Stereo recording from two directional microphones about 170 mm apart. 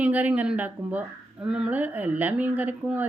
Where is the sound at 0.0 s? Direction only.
10° right (ahead or behind).